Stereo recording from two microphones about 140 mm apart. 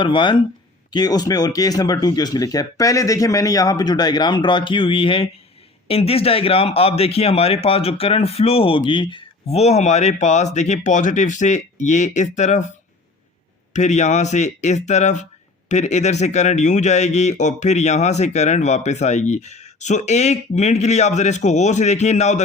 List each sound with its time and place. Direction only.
0.0 s speech: 35° left (ahead or behind); by 12.6 s 60° left (ahead or behind)
13.7 s a man's voice: 55° left (ahead or behind)